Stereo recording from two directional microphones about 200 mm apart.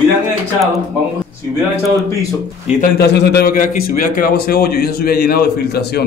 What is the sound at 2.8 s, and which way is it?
A man's voice, 55° left (ahead or behind).